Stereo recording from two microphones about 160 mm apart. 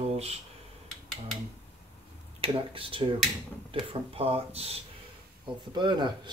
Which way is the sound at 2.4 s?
35° right (ahead or behind).